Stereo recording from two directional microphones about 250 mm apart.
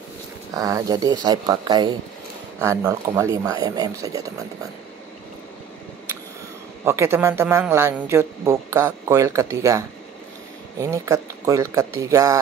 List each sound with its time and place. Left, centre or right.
0.6 s speech: centre
6.8 s speech: centre